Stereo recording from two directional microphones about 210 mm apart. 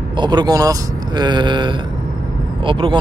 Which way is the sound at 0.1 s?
20° right (ahead or behind).